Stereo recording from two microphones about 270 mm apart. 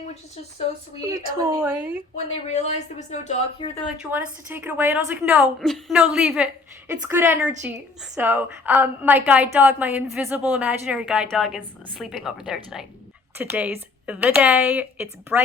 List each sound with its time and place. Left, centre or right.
1.0 s speech: centre
2.5 s speech: left
3.8 s a woman's voice: centre